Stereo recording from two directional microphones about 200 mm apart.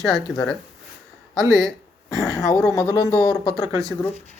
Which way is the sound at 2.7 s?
15° left (ahead or behind).